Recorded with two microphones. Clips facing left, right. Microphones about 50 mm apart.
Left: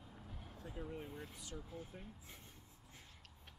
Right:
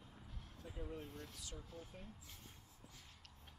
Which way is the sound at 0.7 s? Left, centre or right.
Centre.